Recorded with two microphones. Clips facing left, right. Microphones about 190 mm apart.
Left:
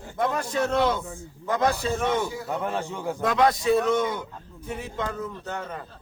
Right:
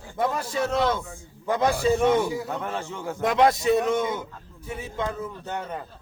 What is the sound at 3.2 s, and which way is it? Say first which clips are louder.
A man's voice: right 2 dB; 25° right (ahead or behind).